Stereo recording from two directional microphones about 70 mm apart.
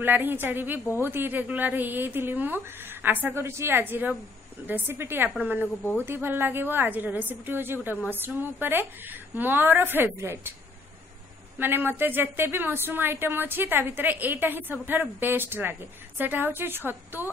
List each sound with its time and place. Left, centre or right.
0.0 s a woman's voice: right
3.4 s a woman's voice: right
11.5 s a woman's voice: right